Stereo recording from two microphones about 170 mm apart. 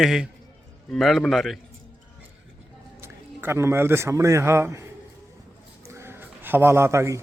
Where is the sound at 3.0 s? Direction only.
15° right (ahead or behind).